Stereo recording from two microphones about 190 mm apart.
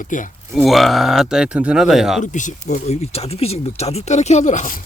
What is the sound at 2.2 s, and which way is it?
Speech, 40° left (ahead or behind).